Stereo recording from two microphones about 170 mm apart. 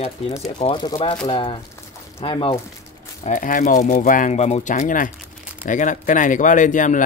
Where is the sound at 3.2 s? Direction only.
50° left (ahead or behind).